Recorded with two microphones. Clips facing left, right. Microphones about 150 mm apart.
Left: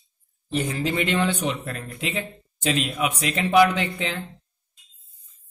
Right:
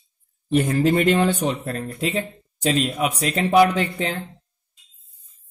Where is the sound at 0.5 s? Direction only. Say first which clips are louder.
Right 7 dB; 50° right (ahead or behind).